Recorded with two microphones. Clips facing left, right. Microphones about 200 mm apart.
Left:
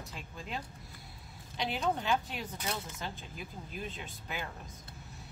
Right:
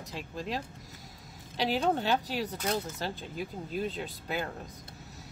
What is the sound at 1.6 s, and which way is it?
Speech, 35° right (ahead or behind).